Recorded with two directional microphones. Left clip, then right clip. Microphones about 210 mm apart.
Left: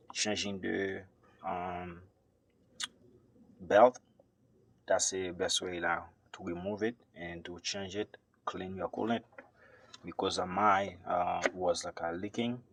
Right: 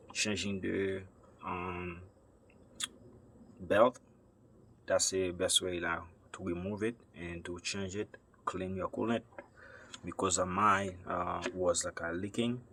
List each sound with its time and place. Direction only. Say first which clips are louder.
0.2 s speech: left 1 dB; 15° left (ahead or behind)
3.7 s speech: left 4 dB; 20° left (ahead or behind)
9.6 s a sound: right 5 dB; 5° right (ahead or behind)
10.6 s speech: left 2 dB; 15° left (ahead or behind)